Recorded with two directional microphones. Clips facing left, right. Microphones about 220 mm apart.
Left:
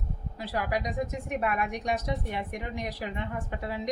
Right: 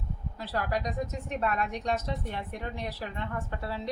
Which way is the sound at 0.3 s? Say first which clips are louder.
Left 1 dB; 15° left (ahead or behind).